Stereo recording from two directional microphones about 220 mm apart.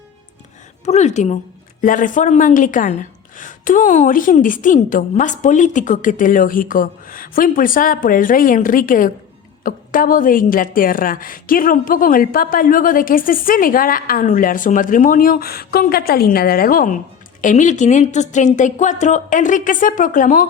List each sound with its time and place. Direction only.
0.9 s a woman's voice: 30° left (ahead or behind)